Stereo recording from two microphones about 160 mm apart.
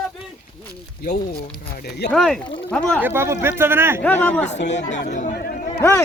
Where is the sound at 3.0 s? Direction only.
15° right (ahead or behind).